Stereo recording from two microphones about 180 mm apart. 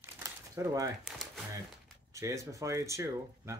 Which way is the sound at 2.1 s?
15° right (ahead or behind).